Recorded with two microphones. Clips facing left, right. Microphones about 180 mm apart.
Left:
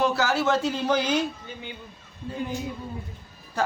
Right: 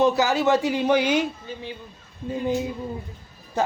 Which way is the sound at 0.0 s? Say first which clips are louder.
Right 4 dB; 20° right (ahead or behind).